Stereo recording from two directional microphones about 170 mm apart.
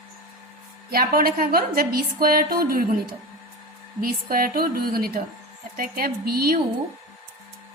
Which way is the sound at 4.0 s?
60° right (ahead or behind).